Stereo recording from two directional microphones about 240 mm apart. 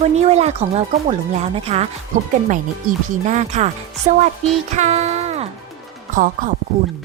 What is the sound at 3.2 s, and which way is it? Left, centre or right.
Speech, right.